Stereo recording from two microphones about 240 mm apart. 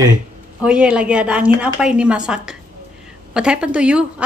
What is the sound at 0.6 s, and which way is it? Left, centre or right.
A woman's voice, centre.